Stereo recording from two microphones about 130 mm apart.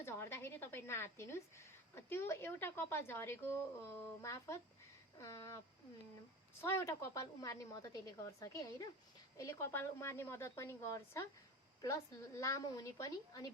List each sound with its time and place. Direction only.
0.0 s a woman's voice: 20° left (ahead or behind)
6.6 s a woman's voice: 20° left (ahead or behind)